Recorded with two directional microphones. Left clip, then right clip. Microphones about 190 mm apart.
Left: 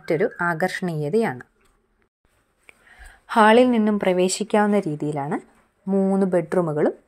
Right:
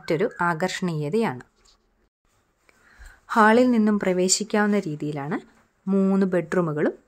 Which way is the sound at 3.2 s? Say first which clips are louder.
Left 3 dB; 5° right (ahead or behind).